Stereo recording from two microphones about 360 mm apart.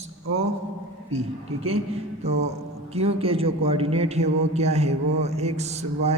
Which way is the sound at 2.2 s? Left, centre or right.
Centre.